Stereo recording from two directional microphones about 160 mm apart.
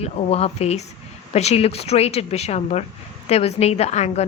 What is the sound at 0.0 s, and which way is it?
A woman's voice, 40° left (ahead or behind).